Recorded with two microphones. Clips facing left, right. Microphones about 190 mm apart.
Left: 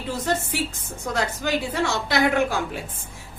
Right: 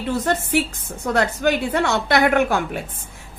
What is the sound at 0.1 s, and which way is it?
A woman's voice, 60° right (ahead or behind).